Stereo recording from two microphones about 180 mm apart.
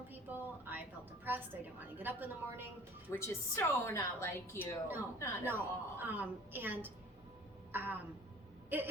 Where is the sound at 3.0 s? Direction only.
15° left (ahead or behind).